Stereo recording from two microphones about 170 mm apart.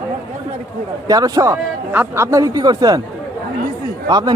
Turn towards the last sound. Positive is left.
turn(degrees=-25)  # may be behind; listen again after turning